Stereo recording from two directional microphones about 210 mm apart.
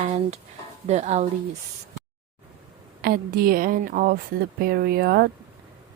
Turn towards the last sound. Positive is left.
turn(degrees=-45)  # may be behind; listen again after turning